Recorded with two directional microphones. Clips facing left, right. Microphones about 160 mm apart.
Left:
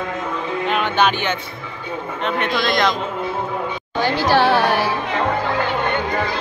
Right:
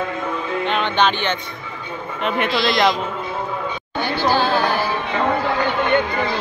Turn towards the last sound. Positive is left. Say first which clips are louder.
# left 3 dB
turn(degrees=75)  # may be behind; listen again after turning